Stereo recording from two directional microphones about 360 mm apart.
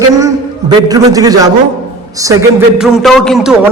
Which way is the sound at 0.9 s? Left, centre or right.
Centre.